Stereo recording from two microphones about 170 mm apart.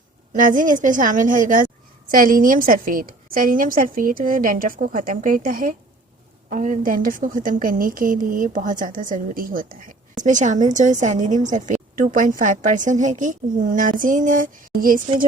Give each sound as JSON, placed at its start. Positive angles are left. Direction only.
{"t": 0.3, "sound": "a woman's voice", "side_deg": -50}